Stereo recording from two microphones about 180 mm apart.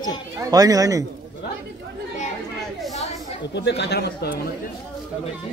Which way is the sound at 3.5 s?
70° left (ahead or behind).